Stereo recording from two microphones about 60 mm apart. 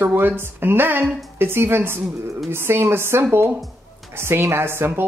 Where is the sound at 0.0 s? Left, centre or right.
Right.